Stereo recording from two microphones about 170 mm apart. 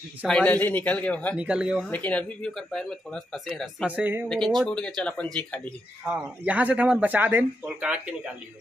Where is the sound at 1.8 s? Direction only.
10° left (ahead or behind); by 4.2 s 10° right (ahead or behind).